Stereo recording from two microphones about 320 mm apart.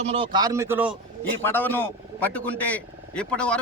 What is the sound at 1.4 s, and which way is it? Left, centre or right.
A man's voice, centre.